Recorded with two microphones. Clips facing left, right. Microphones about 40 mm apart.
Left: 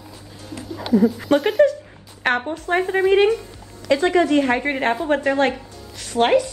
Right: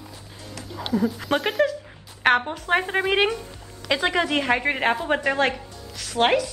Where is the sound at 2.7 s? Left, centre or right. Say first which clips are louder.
Left 4 dB; right.